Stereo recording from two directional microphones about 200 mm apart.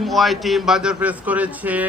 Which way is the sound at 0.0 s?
Centre (ahead or behind).